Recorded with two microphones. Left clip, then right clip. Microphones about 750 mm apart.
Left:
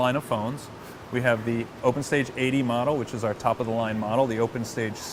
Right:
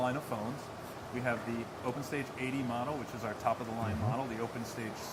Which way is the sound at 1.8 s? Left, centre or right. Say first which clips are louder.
Left 15 dB; left.